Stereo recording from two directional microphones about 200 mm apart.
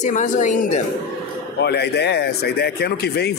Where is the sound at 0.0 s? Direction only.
40° left (ahead or behind).